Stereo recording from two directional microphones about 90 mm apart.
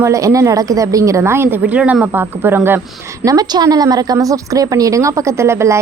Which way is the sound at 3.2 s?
45° right (ahead or behind).